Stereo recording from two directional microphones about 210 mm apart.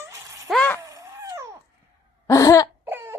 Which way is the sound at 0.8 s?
15° right (ahead or behind).